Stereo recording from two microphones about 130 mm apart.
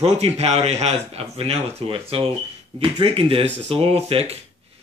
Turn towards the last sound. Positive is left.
turn(degrees=-50)  # may be behind; listen again after turning